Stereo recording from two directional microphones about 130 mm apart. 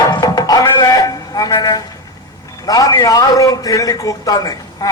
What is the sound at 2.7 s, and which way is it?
A man's voice, 30° left (ahead or behind).